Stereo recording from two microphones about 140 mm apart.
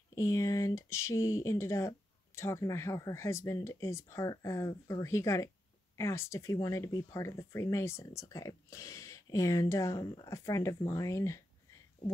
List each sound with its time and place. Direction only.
0.1 s speech: 25° left (ahead or behind)